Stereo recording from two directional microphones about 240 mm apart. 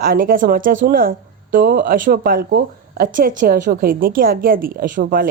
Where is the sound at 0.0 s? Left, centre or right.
Right.